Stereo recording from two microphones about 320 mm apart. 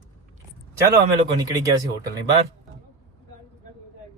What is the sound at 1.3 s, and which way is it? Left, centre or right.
Speech, centre.